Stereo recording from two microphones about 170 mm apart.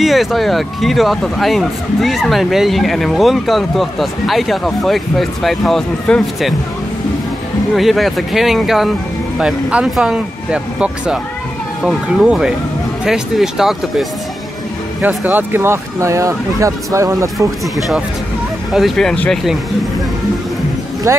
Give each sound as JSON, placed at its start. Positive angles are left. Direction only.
{"t": 0.0, "sound": "speech", "side_deg": 0}
{"t": 7.7, "sound": "speech", "side_deg": 0}
{"t": 17.7, "sound": "speech", "side_deg": 0}
{"t": 21.1, "sound": "speech", "side_deg": -15}